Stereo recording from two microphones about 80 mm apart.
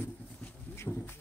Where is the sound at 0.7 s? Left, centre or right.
Left.